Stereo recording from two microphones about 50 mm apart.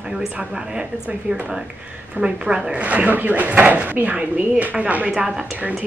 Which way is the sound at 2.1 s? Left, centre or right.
Centre.